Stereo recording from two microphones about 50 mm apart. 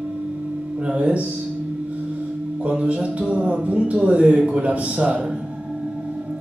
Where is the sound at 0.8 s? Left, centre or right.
Right.